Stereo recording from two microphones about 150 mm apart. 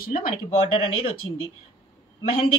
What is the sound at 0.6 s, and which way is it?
Speech, 35° left (ahead or behind).